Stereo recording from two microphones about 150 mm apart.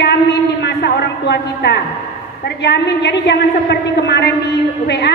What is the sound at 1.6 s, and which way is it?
A woman's voice, 90° left.